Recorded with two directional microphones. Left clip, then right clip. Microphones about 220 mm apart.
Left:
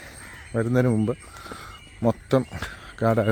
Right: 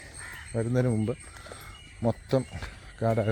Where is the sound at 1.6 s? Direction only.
20° left (ahead or behind).